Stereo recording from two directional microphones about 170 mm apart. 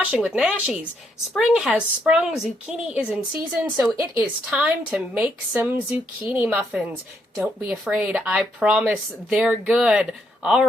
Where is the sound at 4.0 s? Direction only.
15° right (ahead or behind).